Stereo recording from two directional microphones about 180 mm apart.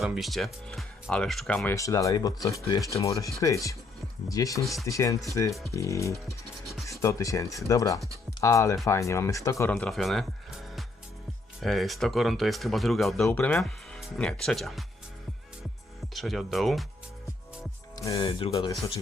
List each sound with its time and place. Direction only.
0.0 s speech: centre (ahead or behind); by 6.1 s 15° left (ahead or behind)
6.2 s music: centre (ahead or behind)
7.0 s speech: 15° left (ahead or behind); by 14.8 s centre (ahead or behind)
16.1 s speech: centre (ahead or behind)
17.9 s music: 20° left (ahead or behind)
18.3 s speech: 30° left (ahead or behind)